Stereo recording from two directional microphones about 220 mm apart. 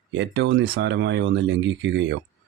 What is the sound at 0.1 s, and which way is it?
Speech, 55° right (ahead or behind).